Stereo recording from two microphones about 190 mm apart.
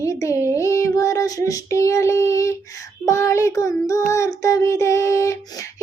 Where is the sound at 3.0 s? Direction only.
15° left (ahead or behind).